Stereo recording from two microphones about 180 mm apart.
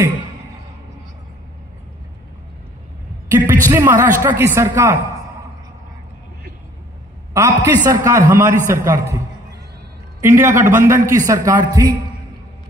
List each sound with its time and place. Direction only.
3.3 s a sound: 10° right (ahead or behind)
4.2 s a man's voice: 15° right (ahead or behind)
7.3 s a man's voice: 15° right (ahead or behind)
10.2 s a man's voice: 15° right (ahead or behind)